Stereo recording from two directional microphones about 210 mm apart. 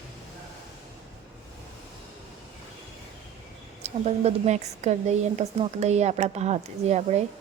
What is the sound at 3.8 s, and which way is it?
A woman's voice, 30° right (ahead or behind).